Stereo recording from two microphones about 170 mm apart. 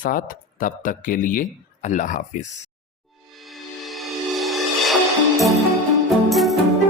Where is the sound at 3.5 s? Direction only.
Centre (ahead or behind).